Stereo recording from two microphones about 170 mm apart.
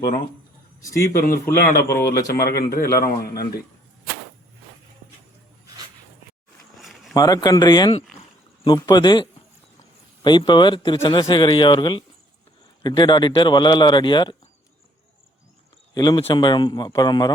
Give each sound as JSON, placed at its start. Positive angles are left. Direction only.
{"t": 1.1, "sound": "a man's voice", "side_deg": 60}
{"t": 6.7, "sound": "a sound", "side_deg": 0}
{"t": 7.1, "sound": "a man's voice", "side_deg": 20}
{"t": 16.0, "sound": "a man's voice", "side_deg": 25}